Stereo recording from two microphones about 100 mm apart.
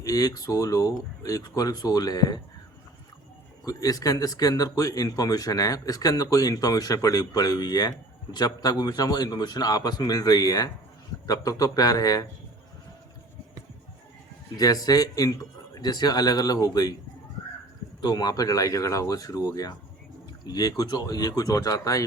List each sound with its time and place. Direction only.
0.0 s speech: 35° left (ahead or behind)
3.7 s speech: 35° left (ahead or behind)
14.5 s speech: 40° left (ahead or behind)
18.0 s speech: 45° left (ahead or behind)